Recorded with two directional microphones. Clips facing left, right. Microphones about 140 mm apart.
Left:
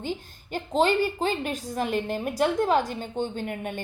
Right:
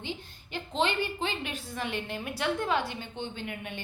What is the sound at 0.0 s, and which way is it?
A woman's voice, 45° left (ahead or behind).